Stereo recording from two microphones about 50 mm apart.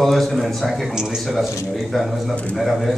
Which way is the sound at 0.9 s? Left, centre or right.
Centre.